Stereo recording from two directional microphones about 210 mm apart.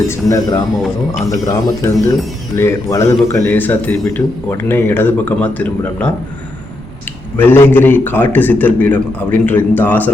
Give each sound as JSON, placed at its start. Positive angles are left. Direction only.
{"t": 0.1, "sound": "a man's voice", "side_deg": 15}
{"t": 7.3, "sound": "a man's voice", "side_deg": 10}